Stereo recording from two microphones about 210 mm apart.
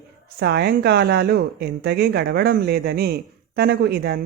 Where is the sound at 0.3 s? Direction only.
50° right (ahead or behind).